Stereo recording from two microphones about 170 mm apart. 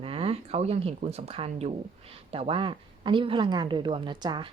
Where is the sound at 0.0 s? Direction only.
35° right (ahead or behind).